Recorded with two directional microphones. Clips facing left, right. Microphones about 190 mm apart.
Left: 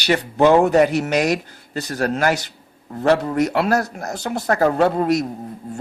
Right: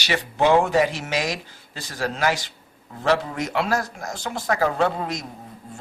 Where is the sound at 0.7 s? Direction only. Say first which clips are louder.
Left 6 dB; 60° left (ahead or behind).